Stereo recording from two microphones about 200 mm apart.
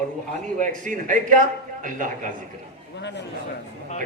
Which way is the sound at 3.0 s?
60° left (ahead or behind).